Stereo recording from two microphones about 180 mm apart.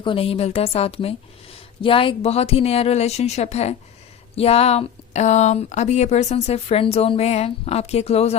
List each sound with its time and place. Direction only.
0.0 s speech: 30° left (ahead or behind)